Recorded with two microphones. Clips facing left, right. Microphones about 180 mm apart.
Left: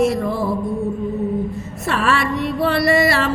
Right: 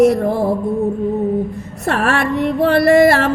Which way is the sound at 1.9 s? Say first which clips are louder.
Right 2 dB; 50° right (ahead or behind).